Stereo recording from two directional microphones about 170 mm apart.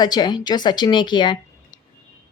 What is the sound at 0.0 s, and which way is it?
A woman's voice, 25° left (ahead or behind).